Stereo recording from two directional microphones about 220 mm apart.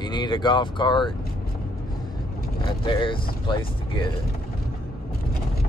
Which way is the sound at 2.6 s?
20° left (ahead or behind).